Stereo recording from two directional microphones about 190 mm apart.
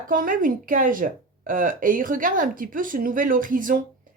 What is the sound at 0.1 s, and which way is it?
Speech, 45° right (ahead or behind).